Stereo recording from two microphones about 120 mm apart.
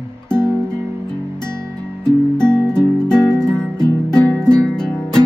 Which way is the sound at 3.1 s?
35° left (ahead or behind).